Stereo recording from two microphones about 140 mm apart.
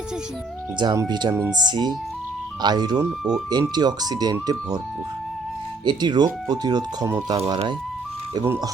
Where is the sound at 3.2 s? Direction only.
5° right (ahead or behind).